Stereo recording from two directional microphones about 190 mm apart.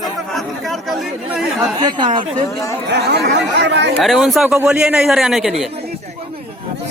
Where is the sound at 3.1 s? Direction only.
60° right (ahead or behind).